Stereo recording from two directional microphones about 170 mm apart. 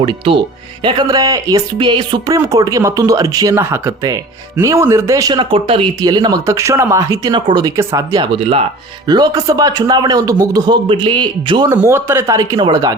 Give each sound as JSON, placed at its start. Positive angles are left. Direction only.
{"t": 0.0, "sound": "speech", "side_deg": -30}
{"t": 9.0, "sound": "speech", "side_deg": -25}
{"t": 11.7, "sound": "speech", "side_deg": -15}